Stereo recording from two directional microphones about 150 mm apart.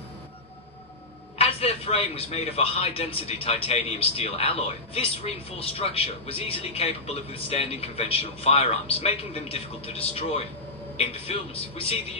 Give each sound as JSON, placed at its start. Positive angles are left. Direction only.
{"t": 1.4, "sound": "a man's voice", "side_deg": 40}